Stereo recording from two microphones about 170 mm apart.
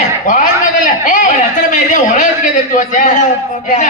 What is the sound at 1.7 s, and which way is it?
A man's voice, 45° left (ahead or behind).